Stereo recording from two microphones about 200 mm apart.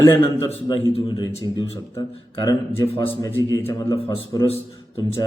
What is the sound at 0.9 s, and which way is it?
Speech, 25° left (ahead or behind).